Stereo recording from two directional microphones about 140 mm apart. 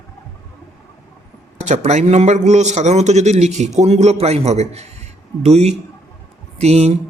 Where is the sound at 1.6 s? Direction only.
55° right (ahead or behind).